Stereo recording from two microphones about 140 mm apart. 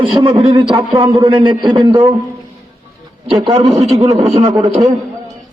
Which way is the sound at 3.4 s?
45° right (ahead or behind).